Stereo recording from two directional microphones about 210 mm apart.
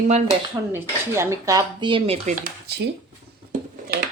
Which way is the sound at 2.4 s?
50° right (ahead or behind).